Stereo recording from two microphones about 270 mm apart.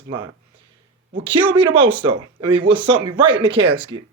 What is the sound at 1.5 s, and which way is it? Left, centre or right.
Speech, centre.